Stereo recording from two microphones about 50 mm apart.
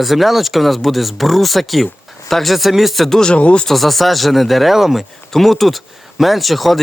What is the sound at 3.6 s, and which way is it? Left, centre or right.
Speech, centre.